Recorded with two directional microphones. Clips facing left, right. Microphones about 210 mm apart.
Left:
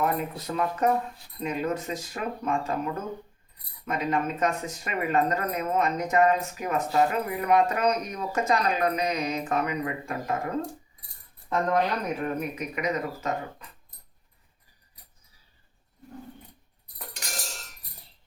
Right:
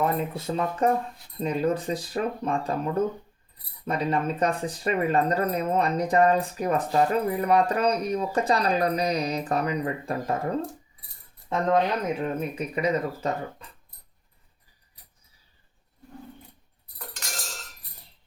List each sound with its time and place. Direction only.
0.0 s speech: 25° right (ahead or behind)